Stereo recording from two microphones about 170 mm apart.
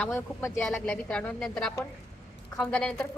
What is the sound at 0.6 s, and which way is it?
Speech, 5° left (ahead or behind).